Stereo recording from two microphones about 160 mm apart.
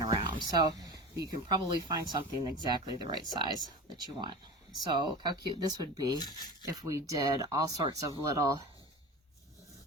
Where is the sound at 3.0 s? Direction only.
30° right (ahead or behind).